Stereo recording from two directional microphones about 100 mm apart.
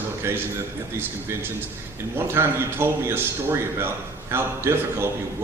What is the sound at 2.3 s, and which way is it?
A man's voice, 25° right (ahead or behind).